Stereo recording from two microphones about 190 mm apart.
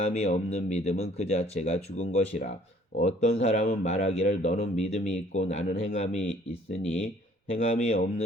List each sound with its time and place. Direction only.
0.0 s speech: 35° left (ahead or behind)